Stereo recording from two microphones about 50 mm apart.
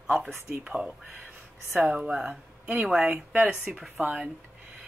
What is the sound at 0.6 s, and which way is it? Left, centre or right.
Speech, centre.